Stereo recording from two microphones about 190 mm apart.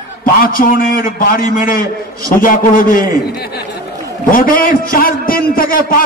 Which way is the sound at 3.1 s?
55° left (ahead or behind).